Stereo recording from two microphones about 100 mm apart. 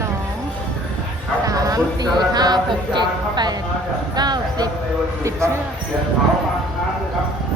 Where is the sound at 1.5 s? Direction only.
35° right (ahead or behind).